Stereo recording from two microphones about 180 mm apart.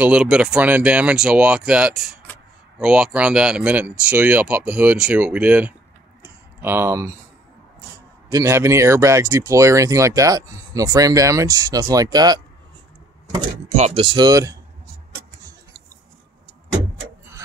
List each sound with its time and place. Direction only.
0.0 s speech: 5° right (ahead or behind)
6.2 s a sound: 10° right (ahead or behind)
8.3 s speech: 15° right (ahead or behind)
13.7 s speech: 35° right (ahead or behind); by 14.6 s 20° right (ahead or behind)